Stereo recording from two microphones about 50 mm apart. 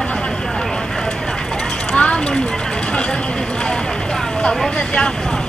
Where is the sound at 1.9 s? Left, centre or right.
Left.